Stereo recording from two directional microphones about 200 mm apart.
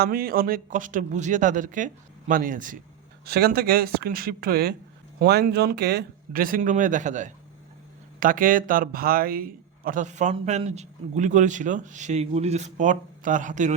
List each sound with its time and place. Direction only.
0.0 s a man's voice: 45° right (ahead or behind)